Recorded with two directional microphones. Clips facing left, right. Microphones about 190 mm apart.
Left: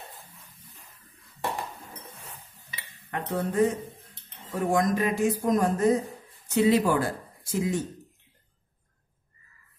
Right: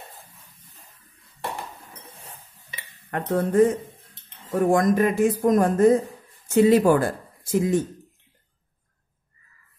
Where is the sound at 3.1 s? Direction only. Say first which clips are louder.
Right 6 dB; 50° right (ahead or behind).